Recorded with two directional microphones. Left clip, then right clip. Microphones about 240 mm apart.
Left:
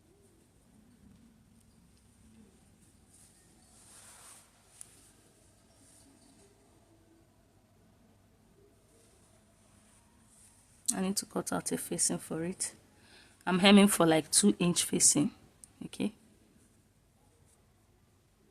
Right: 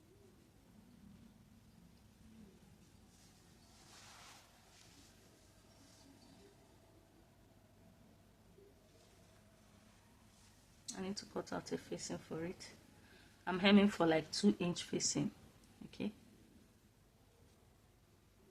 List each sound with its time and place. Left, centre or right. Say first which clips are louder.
10.8 s speech: left 11 dB; left